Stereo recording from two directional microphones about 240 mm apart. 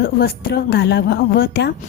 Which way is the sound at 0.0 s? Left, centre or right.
Left.